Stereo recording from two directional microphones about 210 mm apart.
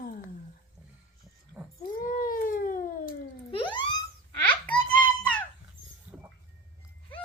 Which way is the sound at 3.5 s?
25° left (ahead or behind).